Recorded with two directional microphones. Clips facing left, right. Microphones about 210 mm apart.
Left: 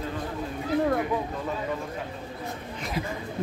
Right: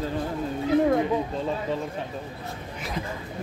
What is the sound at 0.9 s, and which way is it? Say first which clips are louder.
Speech: right 3 dB; 25° right (ahead or behind).